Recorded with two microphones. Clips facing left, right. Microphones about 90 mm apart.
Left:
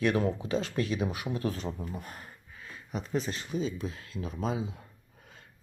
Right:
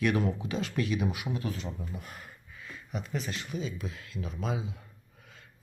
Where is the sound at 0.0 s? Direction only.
30° left (ahead or behind).